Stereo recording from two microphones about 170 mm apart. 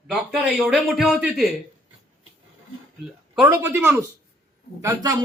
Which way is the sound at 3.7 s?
10° right (ahead or behind).